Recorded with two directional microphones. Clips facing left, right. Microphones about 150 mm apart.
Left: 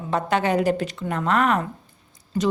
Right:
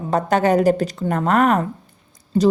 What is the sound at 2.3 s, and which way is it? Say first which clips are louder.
Speech: right 7 dB; 30° right (ahead or behind).